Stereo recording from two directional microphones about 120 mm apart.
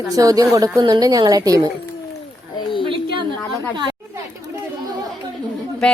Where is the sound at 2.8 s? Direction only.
45° right (ahead or behind).